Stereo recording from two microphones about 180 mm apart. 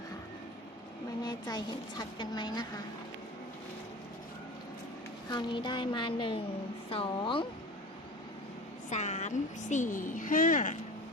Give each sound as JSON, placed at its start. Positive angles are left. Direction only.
{"t": 1.2, "sound": "speech", "side_deg": 20}
{"t": 5.3, "sound": "speech", "side_deg": 25}
{"t": 8.9, "sound": "a woman's voice", "side_deg": 40}